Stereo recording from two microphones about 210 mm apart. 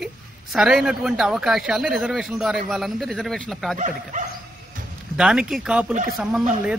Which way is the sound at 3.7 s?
35° right (ahead or behind).